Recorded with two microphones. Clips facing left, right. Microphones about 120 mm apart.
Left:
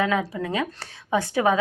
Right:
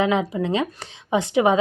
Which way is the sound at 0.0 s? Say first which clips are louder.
Right 3 dB; 20° right (ahead or behind).